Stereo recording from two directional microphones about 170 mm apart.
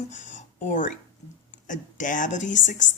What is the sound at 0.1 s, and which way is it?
A woman's voice, 45° left (ahead or behind).